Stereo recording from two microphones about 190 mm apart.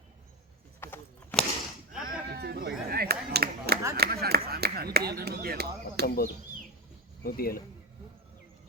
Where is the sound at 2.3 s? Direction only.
60° right (ahead or behind).